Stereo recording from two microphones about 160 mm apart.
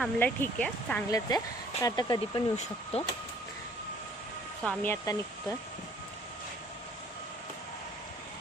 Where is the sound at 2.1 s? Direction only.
40° left (ahead or behind).